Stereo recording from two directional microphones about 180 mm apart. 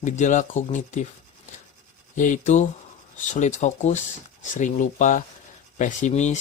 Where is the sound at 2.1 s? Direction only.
45° left (ahead or behind).